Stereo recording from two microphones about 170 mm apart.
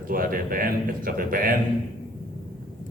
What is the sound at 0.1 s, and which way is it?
A man's voice, 55° right (ahead or behind).